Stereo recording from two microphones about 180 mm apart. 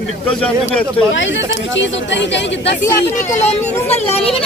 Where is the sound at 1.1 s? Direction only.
90° left.